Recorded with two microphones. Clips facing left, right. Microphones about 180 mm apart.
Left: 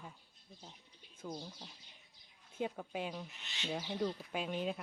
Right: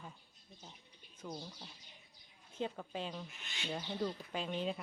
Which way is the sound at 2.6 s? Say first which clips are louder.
Left 1 dB; 10° left (ahead or behind).